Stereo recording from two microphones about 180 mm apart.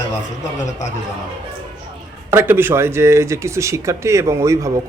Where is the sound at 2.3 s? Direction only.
10° right (ahead or behind).